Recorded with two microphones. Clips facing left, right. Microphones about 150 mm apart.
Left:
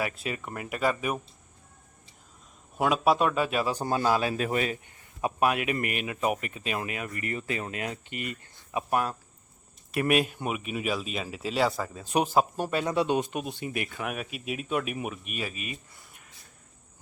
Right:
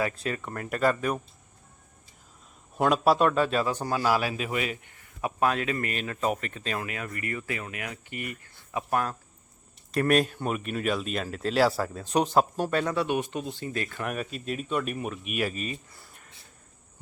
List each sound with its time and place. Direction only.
0.0 s speech: 15° left (ahead or behind)
2.7 s speech: centre (ahead or behind)
3.8 s a man's voice: 25° left (ahead or behind)
4.4 s a man's voice: 40° left (ahead or behind)
5.2 s speech: 15° left (ahead or behind)
14.0 s speech: 5° left (ahead or behind)